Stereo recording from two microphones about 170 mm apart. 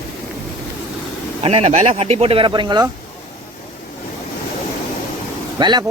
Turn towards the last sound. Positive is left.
turn(degrees=-25)  # may be behind; listen again after turning